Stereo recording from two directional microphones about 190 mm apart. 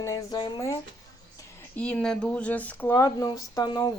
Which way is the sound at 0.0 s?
20° left (ahead or behind).